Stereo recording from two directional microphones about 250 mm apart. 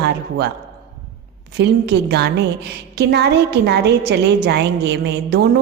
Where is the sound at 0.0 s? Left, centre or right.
Right.